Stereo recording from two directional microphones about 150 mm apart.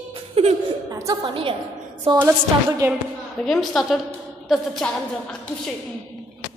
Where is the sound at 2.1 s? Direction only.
15° right (ahead or behind).